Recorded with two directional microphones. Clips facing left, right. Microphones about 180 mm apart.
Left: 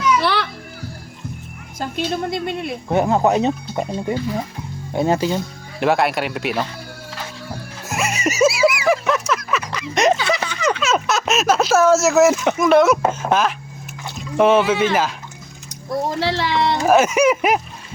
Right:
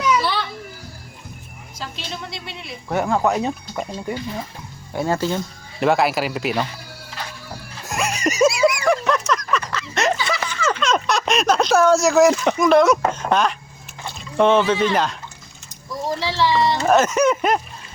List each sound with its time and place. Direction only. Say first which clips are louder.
0.2 s children playing: left 3 dB; 70° left (ahead or behind)
1.8 s speech: left 10 dB; 50° left (ahead or behind)
2.9 s speech: left 3 dB; 20° left (ahead or behind)
5.8 s speech: even; centre (ahead or behind)
7.9 s a sound: left 1 dB; centre (ahead or behind)
10.6 s speech: right 2 dB; 10° left (ahead or behind)
15.7 s a sound: left 3 dB; 60° left (ahead or behind)
16.7 s speech: left 2 dB; 10° left (ahead or behind)